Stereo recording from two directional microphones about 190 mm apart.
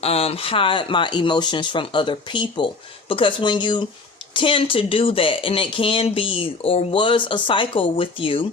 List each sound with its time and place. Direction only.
0.0 s speech: 30° left (ahead or behind)